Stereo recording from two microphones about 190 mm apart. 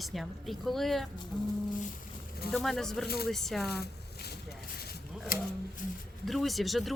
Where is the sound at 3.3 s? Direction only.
Centre (ahead or behind).